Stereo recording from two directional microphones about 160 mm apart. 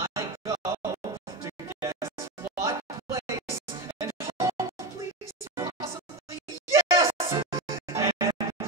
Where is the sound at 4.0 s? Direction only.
20° right (ahead or behind).